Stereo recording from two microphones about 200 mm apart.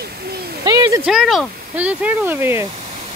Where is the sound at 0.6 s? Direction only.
20° right (ahead or behind).